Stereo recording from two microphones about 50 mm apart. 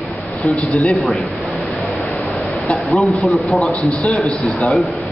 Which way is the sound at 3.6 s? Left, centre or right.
Left.